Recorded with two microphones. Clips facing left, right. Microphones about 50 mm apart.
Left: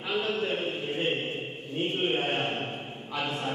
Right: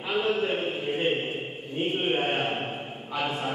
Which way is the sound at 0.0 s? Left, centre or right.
Centre.